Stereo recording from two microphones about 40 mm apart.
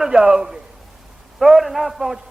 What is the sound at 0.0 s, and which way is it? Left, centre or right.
A man's voice, centre.